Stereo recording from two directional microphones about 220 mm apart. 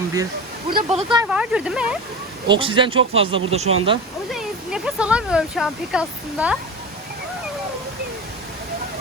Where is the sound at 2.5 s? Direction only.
20° right (ahead or behind).